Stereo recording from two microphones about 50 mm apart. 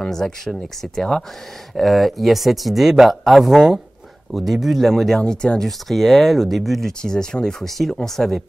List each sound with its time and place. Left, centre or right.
0.0 s speech: centre
5.2 s speech: centre
5.7 s speech: centre
6.9 s speech: centre
7.7 s speech: centre